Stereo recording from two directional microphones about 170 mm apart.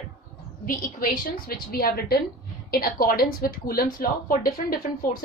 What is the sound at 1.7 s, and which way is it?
A woman's voice, 60° left (ahead or behind).